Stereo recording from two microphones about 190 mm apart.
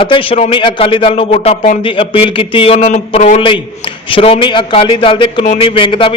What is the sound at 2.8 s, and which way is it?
A man's voice, 40° left (ahead or behind).